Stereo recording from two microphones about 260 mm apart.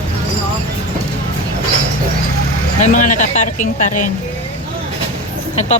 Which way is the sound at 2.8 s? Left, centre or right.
Left.